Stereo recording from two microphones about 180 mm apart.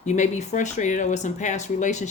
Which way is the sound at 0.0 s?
40° left (ahead or behind).